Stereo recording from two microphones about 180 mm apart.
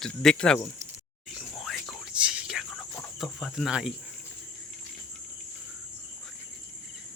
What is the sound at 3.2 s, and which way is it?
Speech, centre (ahead or behind).